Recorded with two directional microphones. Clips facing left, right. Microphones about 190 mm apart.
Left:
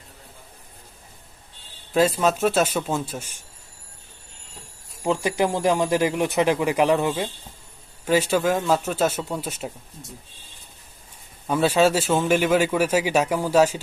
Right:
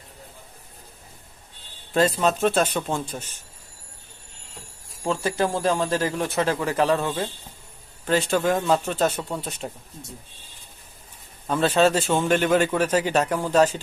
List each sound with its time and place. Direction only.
1.9 s speech: 10° left (ahead or behind)
5.0 s speech: 15° left (ahead or behind)
11.4 s speech: 10° left (ahead or behind)